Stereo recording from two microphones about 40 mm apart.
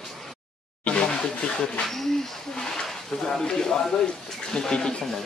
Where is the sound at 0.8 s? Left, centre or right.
Left.